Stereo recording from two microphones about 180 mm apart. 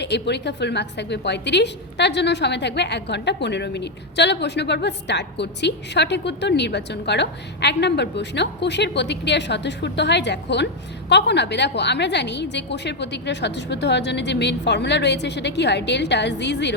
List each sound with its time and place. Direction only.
0.0 s a woman's voice: 70° left (ahead or behind)